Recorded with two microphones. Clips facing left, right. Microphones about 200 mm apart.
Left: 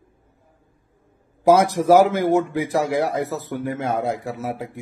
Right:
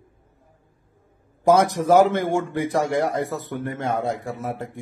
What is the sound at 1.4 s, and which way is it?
A man's voice, 5° left (ahead or behind).